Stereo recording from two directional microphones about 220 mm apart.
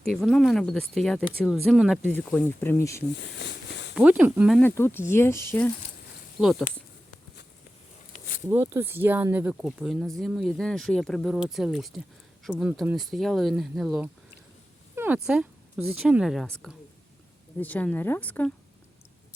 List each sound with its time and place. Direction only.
0.1 s speech: centre (ahead or behind)
3.2 s a sound: 50° left (ahead or behind)
3.9 s speech: 5° right (ahead or behind)
4.6 s speech: 10° left (ahead or behind)
6.4 s speech: centre (ahead or behind)
8.4 s speech: 10° right (ahead or behind); by 18.5 s 5° left (ahead or behind)